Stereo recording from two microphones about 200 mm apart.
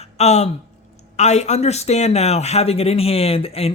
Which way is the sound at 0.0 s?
35° left (ahead or behind).